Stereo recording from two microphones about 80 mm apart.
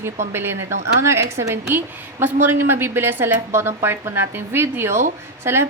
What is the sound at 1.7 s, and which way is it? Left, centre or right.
A woman's voice, right.